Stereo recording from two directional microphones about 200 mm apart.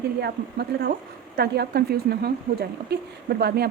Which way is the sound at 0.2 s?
55° right (ahead or behind).